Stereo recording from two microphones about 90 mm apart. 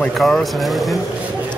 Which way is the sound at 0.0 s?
5° left (ahead or behind).